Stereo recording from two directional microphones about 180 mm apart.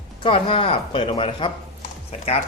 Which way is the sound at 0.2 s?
30° left (ahead or behind).